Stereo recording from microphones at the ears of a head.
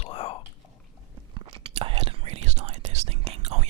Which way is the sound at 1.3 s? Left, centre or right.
Right.